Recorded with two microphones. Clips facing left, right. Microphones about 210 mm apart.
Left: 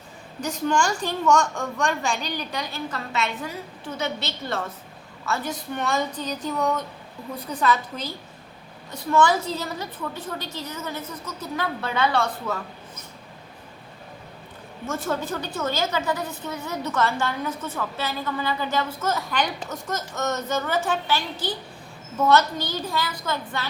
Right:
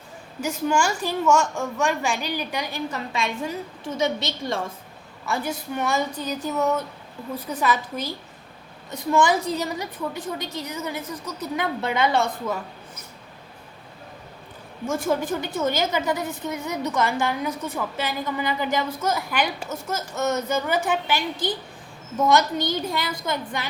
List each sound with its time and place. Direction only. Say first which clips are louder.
0.4 s a woman's voice: right 1 dB; 10° right (ahead or behind)
14.8 s a woman's voice: right 4 dB; 10° right (ahead or behind)